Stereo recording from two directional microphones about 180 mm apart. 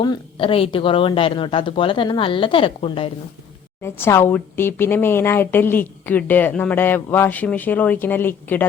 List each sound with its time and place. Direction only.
0.0 s a woman's voice: 25° left (ahead or behind)
3.8 s speech: 15° left (ahead or behind)